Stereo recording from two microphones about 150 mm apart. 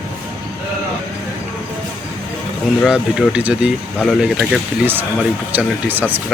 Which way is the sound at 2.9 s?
10° right (ahead or behind).